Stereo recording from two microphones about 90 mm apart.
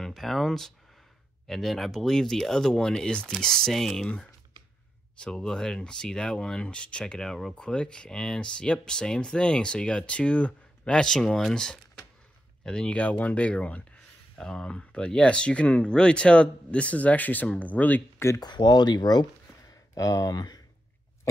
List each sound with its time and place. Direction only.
0.0 s speech: centre (ahead or behind); by 18.0 s 20° left (ahead or behind)
18.4 s speech: 50° left (ahead or behind)
19.9 s speech: 35° left (ahead or behind)